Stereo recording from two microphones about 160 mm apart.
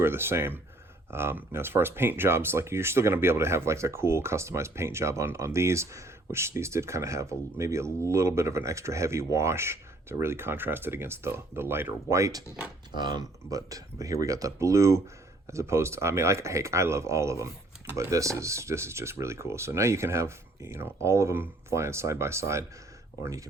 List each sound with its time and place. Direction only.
0.0 s speech: 15° right (ahead or behind)